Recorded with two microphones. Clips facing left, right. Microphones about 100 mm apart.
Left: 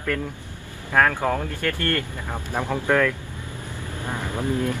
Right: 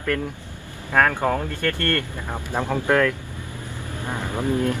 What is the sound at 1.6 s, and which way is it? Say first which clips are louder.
Speech: right 1 dB; 10° left (ahead or behind).